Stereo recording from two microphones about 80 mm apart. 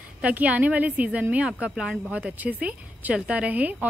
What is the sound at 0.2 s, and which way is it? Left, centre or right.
A woman's voice, centre.